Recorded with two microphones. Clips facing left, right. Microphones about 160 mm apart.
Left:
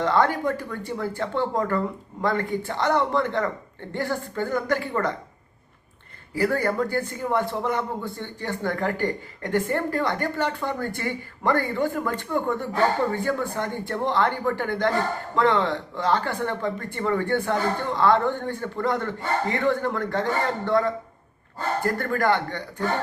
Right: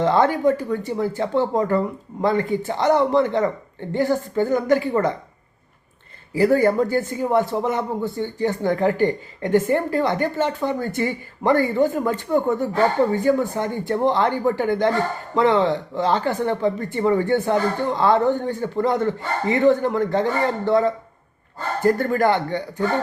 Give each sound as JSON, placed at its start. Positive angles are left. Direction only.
{"t": 0.0, "sound": "speech", "side_deg": -20}
{"t": 6.3, "sound": "speech", "side_deg": -20}